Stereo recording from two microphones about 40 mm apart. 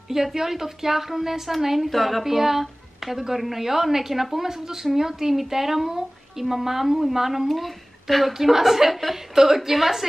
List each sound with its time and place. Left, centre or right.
0.1 s speech: centre